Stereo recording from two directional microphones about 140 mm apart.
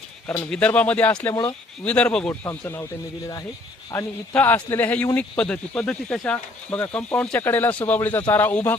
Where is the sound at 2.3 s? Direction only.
20° left (ahead or behind).